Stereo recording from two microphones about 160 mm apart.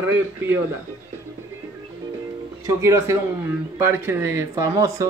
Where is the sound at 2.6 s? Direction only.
20° right (ahead or behind).